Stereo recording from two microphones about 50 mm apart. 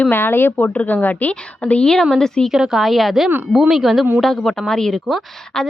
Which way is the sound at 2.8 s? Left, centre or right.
Centre.